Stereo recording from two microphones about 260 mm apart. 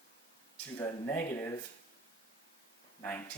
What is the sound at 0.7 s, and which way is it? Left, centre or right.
Speech, centre.